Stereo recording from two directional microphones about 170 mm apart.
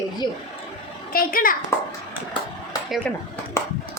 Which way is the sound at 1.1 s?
60° left (ahead or behind).